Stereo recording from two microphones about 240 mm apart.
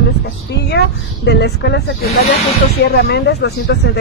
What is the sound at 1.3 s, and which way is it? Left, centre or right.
Speech, left.